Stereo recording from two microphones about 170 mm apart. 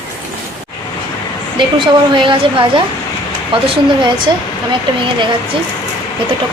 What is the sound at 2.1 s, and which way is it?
Speech, 30° right (ahead or behind).